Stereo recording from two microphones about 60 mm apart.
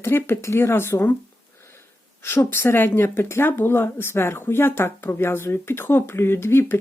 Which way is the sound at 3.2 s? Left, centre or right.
Left.